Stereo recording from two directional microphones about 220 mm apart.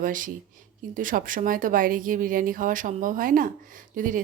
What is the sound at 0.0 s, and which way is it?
Speech, 35° right (ahead or behind).